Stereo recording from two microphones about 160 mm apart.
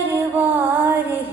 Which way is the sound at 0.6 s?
10° right (ahead or behind).